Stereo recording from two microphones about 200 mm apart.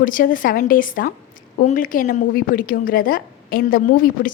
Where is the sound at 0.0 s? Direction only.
40° left (ahead or behind).